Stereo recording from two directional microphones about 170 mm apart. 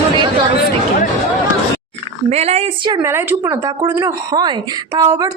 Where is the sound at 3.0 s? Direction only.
15° right (ahead or behind).